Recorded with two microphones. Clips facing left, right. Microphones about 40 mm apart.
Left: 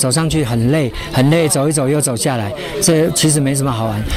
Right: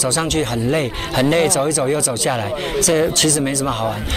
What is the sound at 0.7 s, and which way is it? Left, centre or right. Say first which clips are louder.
Speech: left 3 dB; right.